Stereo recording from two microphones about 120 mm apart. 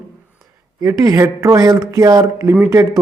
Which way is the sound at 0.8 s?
30° right (ahead or behind).